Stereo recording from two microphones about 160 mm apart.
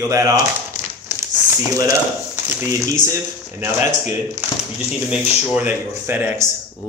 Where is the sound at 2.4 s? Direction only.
20° right (ahead or behind).